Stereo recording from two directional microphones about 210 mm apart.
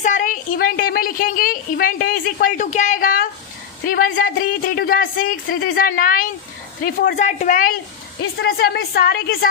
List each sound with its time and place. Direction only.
0.0 s a woman's voice: 35° left (ahead or behind)
8.4 s speech: 50° left (ahead or behind)